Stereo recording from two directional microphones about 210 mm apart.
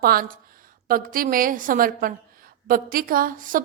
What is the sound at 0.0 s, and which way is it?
A woman's voice, 45° right (ahead or behind).